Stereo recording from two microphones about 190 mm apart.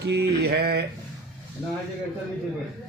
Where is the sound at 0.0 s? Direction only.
60° right (ahead or behind).